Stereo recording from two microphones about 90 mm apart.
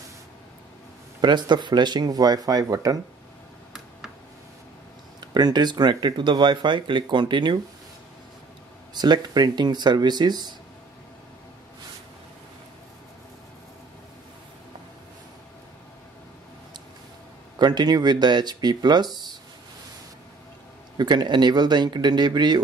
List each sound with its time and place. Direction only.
1.2 s speech: 55° right (ahead or behind)
5.3 s speech: 50° right (ahead or behind)
8.9 s speech: 50° right (ahead or behind)
17.6 s speech: 50° right (ahead or behind)
21.0 s speech: 55° right (ahead or behind)